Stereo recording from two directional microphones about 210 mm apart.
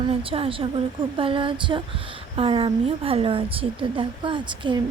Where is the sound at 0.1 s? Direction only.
25° right (ahead or behind).